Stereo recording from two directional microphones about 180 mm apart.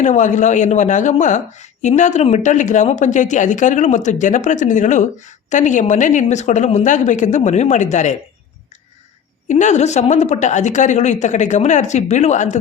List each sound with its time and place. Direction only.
0.0 s speech: 40° left (ahead or behind)
9.5 s a woman's voice: 40° left (ahead or behind)